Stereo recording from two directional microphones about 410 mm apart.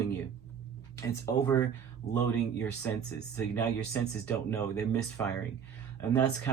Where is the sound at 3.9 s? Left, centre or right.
Centre.